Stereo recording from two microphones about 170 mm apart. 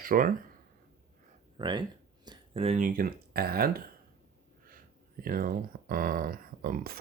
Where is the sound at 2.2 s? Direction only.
35° right (ahead or behind).